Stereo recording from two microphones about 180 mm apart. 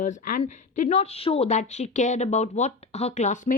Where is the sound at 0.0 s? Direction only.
50° left (ahead or behind).